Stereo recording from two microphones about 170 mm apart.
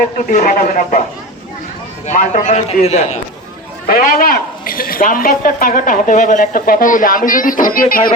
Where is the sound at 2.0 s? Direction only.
45° left (ahead or behind).